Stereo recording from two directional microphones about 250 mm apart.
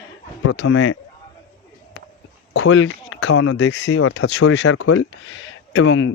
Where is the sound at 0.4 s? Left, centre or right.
Left.